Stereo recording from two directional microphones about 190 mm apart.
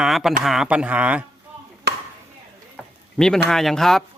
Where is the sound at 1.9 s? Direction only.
60° right (ahead or behind).